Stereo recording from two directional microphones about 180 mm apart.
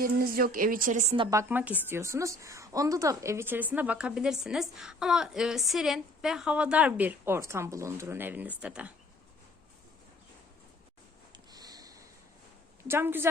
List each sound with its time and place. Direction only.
0.0 s speech: 55° right (ahead or behind)
1.1 s a woman's voice: 30° right (ahead or behind)
1.4 s a woman's voice: 10° right (ahead or behind)
11.3 s sniff: 20° right (ahead or behind)
12.9 s a woman's voice: 10° right (ahead or behind)